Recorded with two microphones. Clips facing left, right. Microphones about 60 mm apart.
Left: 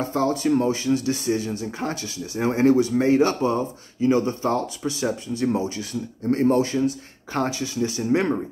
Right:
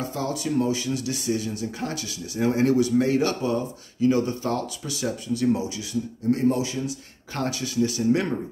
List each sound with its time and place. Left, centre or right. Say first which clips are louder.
0.0 s speech: left 6 dB; left
7.3 s speech: left 1 dB; left